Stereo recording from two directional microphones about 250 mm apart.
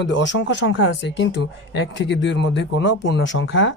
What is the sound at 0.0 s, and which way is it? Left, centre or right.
Speech, left.